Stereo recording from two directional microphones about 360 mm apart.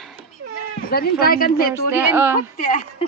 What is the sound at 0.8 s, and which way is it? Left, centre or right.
Speech, left.